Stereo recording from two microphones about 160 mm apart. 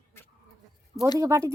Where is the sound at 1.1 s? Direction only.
20° right (ahead or behind).